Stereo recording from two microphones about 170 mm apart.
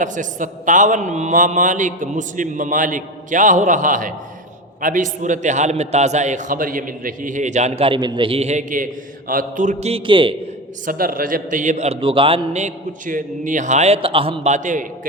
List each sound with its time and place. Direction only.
0.0 s a man's voice: 50° right (ahead or behind); by 10.3 s 30° right (ahead or behind)
10.8 s a man's voice: 55° right (ahead or behind); by 12.4 s 30° right (ahead or behind)
12.5 s a man's voice: 50° right (ahead or behind)